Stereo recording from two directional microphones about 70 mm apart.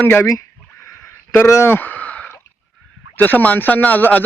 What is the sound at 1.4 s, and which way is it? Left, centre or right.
Speech, left.